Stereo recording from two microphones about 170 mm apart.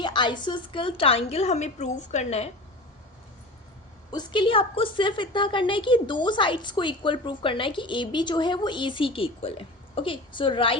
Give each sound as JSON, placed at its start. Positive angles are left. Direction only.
{"t": 0.0, "sound": "a woman's voice", "side_deg": 25}
{"t": 4.1, "sound": "a woman's voice", "side_deg": 25}